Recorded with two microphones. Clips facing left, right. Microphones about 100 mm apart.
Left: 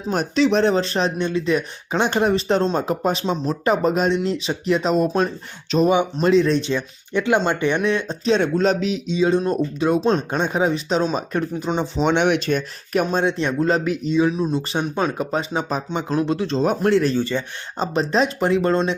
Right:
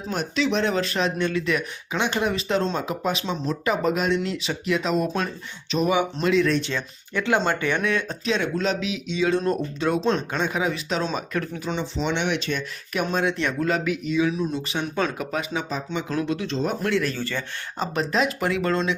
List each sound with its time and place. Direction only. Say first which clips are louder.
0.1 s speech: left 6 dB; 40° left (ahead or behind)
1.9 s speech: left 6 dB; 40° left (ahead or behind)
4.1 s speech: left 3 dB; 25° left (ahead or behind); by 9.0 s 40° left (ahead or behind)
9.1 s speech: left 3 dB; 20° left (ahead or behind)
11.8 s speech: left 8 dB; 50° left (ahead or behind)
13.1 s speech: left 4 dB; 25° left (ahead or behind)
15.7 s speech: left 4 dB; 50° left (ahead or behind)
16.0 s speech: left 6 dB; 30° left (ahead or behind)
17.2 s speech: left 7 dB; 20° left (ahead or behind)